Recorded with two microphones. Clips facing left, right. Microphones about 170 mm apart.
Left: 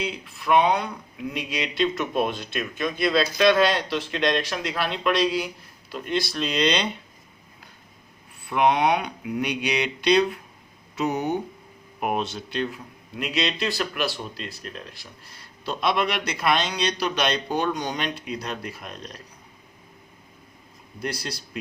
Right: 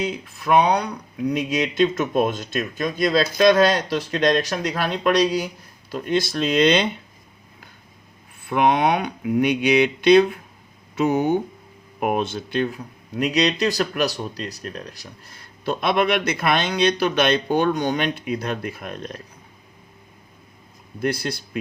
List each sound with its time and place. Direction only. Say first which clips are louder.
0.0 s speech: right 4 dB; 45° right (ahead or behind)
8.4 s speech: right 2 dB; 50° right (ahead or behind)
21.0 s speech: right 7 dB; 55° right (ahead or behind)